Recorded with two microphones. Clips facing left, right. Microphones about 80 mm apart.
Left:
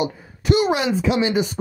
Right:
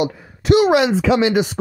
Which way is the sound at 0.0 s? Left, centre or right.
Right.